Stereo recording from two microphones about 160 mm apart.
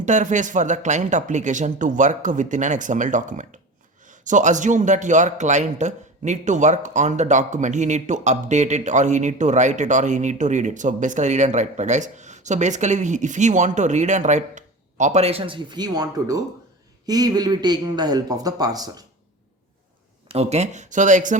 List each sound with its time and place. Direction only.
0.0 s speech: 50° right (ahead or behind); by 19.0 s 25° right (ahead or behind)
20.2 s speech: 40° right (ahead or behind)